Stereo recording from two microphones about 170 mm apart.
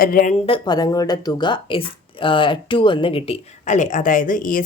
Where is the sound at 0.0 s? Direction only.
55° left (ahead or behind).